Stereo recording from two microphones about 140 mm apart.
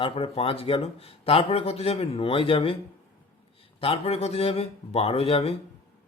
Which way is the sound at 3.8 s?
45° left (ahead or behind).